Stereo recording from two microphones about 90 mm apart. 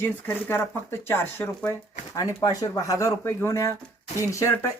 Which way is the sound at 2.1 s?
40° left (ahead or behind).